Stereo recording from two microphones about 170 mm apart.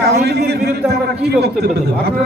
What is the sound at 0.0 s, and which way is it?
A man's voice, 80° right.